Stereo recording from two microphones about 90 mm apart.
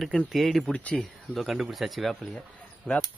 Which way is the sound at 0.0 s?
5° left (ahead or behind).